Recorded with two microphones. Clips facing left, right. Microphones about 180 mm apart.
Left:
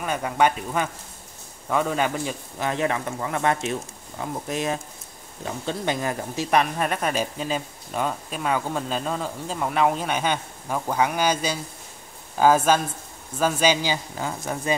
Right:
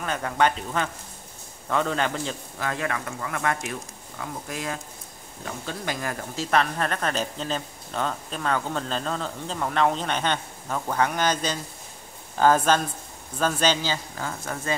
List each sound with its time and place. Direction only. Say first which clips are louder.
0.0 s speech: left 2 dB; 10° left (ahead or behind)
2.6 s speech: left 4 dB; 20° left (ahead or behind)